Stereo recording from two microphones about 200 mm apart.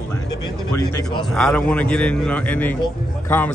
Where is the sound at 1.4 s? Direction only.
5° left (ahead or behind).